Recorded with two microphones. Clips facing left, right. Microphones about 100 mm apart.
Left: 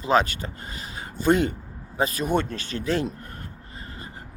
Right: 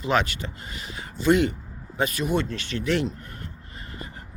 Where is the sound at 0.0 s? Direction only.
35° left (ahead or behind).